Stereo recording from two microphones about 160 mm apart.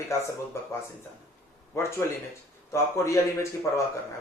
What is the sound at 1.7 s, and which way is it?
A man's voice, 15° left (ahead or behind).